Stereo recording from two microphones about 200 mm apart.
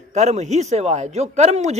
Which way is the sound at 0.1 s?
35° right (ahead or behind).